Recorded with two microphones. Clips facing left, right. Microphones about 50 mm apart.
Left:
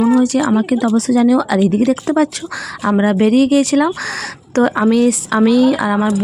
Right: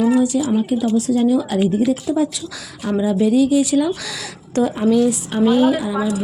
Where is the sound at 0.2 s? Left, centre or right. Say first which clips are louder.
Left 4 dB; left.